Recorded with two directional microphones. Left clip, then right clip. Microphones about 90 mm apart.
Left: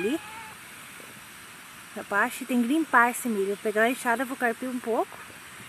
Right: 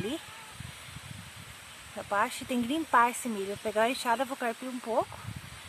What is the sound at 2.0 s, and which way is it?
Speech, centre (ahead or behind).